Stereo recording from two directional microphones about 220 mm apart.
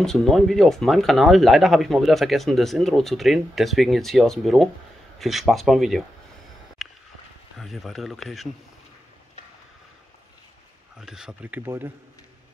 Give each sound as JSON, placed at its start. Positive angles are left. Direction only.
{"t": 0.0, "sound": "speech", "side_deg": 0}
{"t": 6.8, "sound": "a sound", "side_deg": 0}
{"t": 7.5, "sound": "speech", "side_deg": 0}
{"t": 11.0, "sound": "speech", "side_deg": -5}